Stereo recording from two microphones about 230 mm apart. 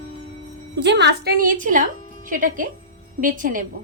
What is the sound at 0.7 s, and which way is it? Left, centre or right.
A woman's voice, right.